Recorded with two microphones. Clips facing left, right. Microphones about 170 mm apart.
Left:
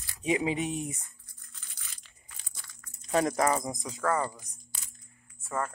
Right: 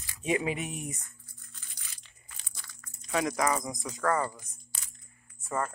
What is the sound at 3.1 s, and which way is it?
Speech, 40° left (ahead or behind).